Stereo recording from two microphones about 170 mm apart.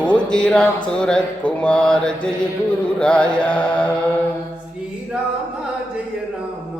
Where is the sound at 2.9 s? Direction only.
5° left (ahead or behind).